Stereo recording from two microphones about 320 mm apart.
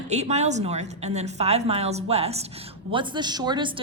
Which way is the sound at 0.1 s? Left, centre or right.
Right.